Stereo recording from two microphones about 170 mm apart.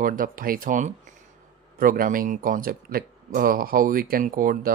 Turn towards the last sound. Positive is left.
turn(degrees=-55)  # may be behind; listen again after turning